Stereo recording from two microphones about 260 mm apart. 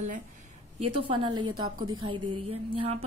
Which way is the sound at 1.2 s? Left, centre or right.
Centre.